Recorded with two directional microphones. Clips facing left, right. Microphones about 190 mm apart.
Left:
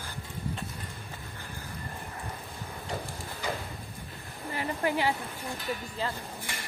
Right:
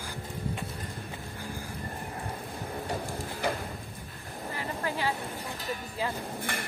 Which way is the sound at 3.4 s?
60° right (ahead or behind).